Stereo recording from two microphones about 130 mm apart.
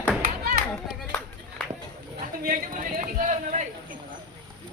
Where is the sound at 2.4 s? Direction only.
90° right.